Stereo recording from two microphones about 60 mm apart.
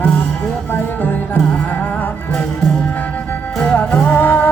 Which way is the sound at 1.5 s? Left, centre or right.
Left.